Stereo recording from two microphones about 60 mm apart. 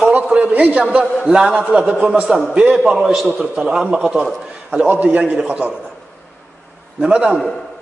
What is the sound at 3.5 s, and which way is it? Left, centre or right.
A man's voice, centre.